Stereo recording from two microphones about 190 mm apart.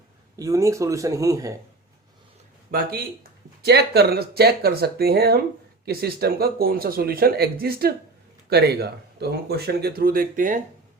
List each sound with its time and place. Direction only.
0.3 s speech: 15° right (ahead or behind)
2.7 s speech: 50° right (ahead or behind)